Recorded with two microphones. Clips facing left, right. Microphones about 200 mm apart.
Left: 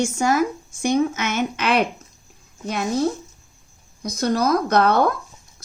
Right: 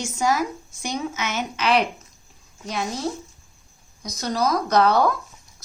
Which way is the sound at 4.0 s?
55° left (ahead or behind).